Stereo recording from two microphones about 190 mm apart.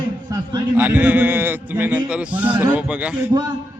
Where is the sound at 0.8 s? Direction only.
10° right (ahead or behind).